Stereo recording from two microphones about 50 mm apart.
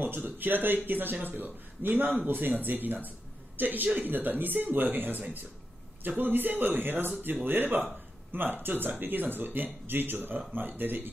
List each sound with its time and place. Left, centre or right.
0.0 s speech: right